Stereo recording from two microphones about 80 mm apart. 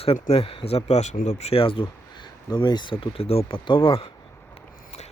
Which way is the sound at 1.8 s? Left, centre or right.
Left.